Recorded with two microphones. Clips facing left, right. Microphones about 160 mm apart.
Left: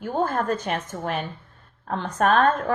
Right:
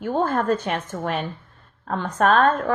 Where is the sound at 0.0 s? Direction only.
50° right (ahead or behind).